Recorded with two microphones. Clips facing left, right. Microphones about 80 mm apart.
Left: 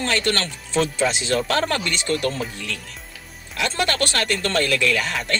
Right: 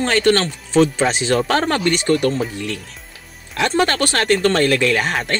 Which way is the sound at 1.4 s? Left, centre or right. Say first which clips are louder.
Right 5 dB; right.